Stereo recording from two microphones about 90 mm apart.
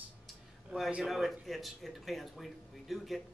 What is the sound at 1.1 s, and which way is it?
Speech, centre (ahead or behind).